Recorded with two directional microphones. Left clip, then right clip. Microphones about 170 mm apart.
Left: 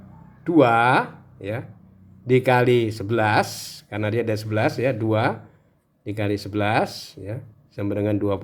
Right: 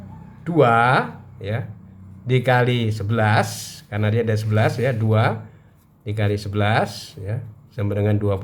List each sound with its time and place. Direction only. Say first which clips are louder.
0.4 s speech: right 1 dB; 25° left (ahead or behind)